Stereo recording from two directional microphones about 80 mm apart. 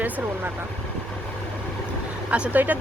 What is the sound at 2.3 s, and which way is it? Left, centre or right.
Speech, centre.